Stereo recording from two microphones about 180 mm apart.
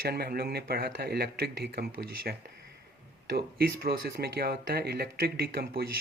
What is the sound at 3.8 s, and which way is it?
Speech, 60° right (ahead or behind).